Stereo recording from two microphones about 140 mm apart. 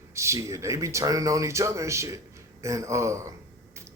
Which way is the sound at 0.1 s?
20° right (ahead or behind).